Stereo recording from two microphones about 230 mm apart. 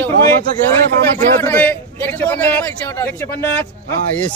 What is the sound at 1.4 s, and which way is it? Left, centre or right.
A man's voice, centre.